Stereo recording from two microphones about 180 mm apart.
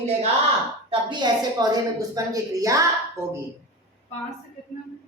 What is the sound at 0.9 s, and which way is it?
A woman's voice, 25° right (ahead or behind).